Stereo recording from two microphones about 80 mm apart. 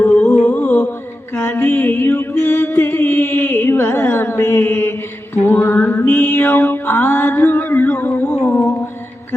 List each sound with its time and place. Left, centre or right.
0.2 s music: centre
0.5 s mantra: left
1.3 s music: left